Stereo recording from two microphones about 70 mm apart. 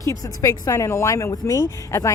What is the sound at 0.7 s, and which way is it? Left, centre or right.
Speech, left.